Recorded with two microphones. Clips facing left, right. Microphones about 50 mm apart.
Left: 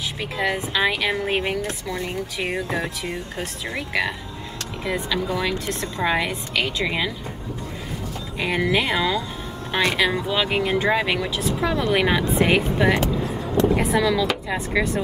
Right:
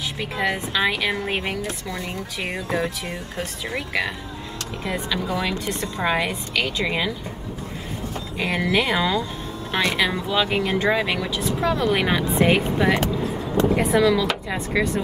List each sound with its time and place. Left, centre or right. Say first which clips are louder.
0.4 s a woman's voice: left 1 dB; centre
1.9 s a woman's voice: left 2 dB; left; by 7.1 s centre
8.4 s a woman's voice: even; centre